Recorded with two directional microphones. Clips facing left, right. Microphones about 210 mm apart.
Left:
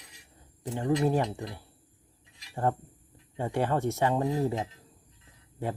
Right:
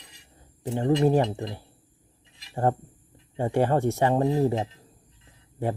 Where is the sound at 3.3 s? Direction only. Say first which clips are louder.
Right 5 dB; 45° right (ahead or behind).